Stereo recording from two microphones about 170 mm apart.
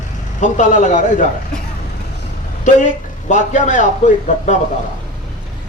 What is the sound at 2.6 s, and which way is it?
A man's voice, 45° left (ahead or behind).